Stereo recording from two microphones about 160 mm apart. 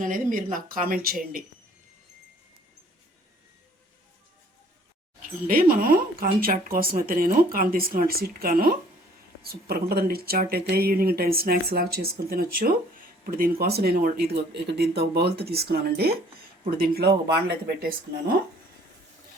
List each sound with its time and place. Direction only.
0.0 s speech: 55° right (ahead or behind)
5.2 s speech: 65° right (ahead or behind); by 17.2 s 80° right